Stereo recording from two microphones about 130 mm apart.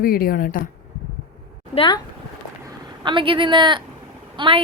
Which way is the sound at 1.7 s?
35° left (ahead or behind).